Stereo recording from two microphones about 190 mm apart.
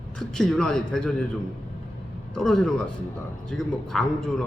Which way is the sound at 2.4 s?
Centre (ahead or behind).